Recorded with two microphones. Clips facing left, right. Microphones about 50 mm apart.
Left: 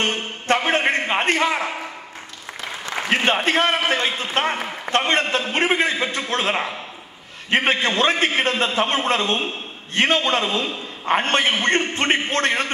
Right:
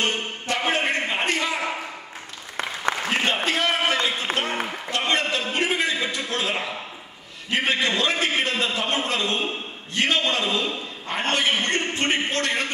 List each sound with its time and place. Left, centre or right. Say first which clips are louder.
0.0 s music: left 2 dB; left
3.3 s a man's voice: left 5 dB; left